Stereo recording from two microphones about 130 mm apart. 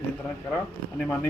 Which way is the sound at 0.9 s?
10° left (ahead or behind).